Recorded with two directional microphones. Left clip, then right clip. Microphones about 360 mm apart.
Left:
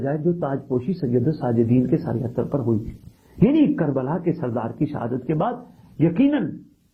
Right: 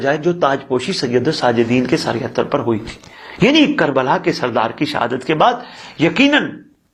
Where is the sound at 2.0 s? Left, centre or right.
Centre.